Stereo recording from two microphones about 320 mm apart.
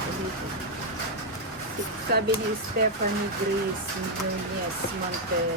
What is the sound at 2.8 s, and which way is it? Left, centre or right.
Speech, right.